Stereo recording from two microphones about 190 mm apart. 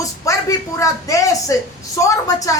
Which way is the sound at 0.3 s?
15° left (ahead or behind).